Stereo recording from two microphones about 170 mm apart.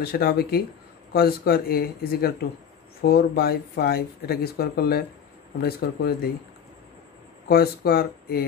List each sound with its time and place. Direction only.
0.0 s speech: 65° left (ahead or behind)
7.4 s speech: 65° left (ahead or behind)